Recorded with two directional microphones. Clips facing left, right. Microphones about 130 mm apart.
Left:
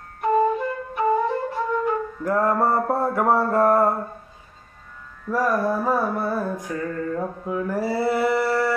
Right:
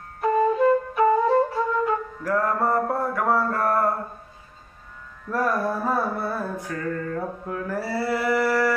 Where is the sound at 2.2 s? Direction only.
25° left (ahead or behind).